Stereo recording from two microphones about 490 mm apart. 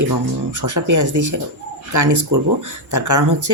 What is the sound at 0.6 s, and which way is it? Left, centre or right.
Speech, right.